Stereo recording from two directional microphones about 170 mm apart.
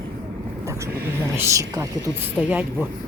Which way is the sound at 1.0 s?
15° right (ahead or behind).